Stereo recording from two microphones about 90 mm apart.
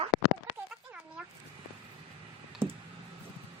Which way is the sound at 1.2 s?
10° right (ahead or behind).